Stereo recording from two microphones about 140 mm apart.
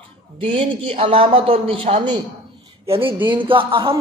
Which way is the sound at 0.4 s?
40° right (ahead or behind).